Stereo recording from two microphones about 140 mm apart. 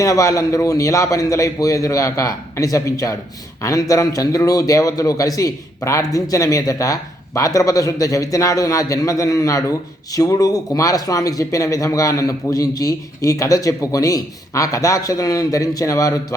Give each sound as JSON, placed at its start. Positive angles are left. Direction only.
{"t": 0.0, "sound": "a man's voice", "side_deg": 25}